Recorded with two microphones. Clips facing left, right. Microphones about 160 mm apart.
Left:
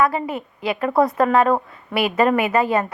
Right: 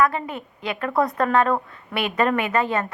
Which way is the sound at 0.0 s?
5° left (ahead or behind).